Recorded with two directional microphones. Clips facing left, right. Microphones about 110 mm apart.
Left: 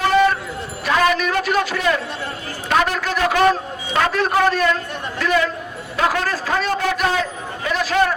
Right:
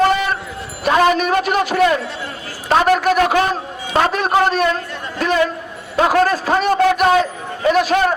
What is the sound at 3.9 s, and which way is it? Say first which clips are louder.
Speech: right 3 dB; 20° right (ahead or behind).